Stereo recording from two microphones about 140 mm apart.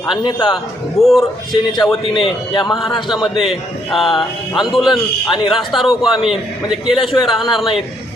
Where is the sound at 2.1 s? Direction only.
40° left (ahead or behind).